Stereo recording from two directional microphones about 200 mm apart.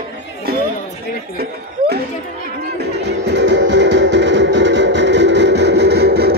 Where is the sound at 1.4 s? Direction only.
55° right (ahead or behind).